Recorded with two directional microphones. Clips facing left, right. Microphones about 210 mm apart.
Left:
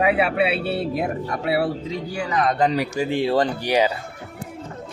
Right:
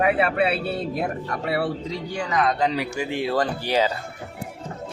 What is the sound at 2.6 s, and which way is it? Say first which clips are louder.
Speech: left 3 dB; 45° left (ahead or behind).